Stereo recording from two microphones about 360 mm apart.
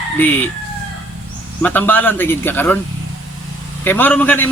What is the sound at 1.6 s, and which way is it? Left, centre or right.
A man's voice, centre.